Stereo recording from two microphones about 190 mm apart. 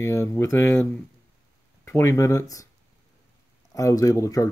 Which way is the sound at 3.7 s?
15° left (ahead or behind).